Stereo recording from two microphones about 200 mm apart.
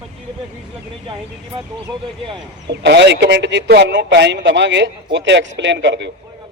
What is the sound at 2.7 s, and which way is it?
Speech, 60° right (ahead or behind).